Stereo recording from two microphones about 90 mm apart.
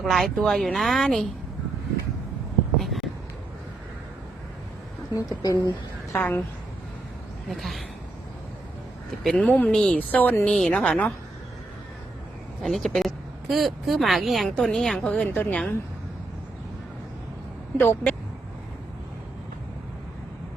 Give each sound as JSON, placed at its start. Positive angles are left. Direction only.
{"t": 0.0, "sound": "speech", "side_deg": 0}
{"t": 2.7, "sound": "a sound", "side_deg": 0}
{"t": 5.1, "sound": "speech", "side_deg": 40}
{"t": 6.1, "sound": "a woman's voice", "side_deg": 20}
{"t": 7.5, "sound": "speech", "side_deg": 0}
{"t": 9.2, "sound": "a woman's voice", "side_deg": 10}
{"t": 12.6, "sound": "a woman's voice", "side_deg": 5}